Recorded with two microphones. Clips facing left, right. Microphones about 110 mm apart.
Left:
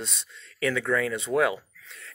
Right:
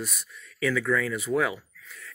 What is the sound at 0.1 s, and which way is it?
Speech, 65° left (ahead or behind).